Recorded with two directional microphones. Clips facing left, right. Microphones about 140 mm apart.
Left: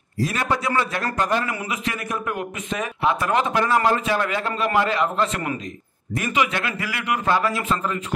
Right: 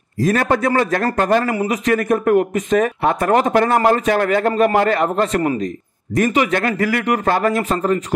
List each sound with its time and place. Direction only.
0.2 s speech: 45° right (ahead or behind)
1.5 s speech: 35° right (ahead or behind)